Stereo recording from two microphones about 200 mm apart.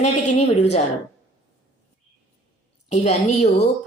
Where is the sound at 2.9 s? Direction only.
35° left (ahead or behind).